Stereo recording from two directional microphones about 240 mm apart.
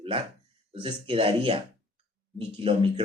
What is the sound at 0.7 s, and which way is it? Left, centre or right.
Speech, right.